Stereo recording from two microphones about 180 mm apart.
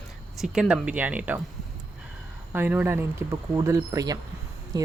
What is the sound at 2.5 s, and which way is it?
Speech, 10° right (ahead or behind).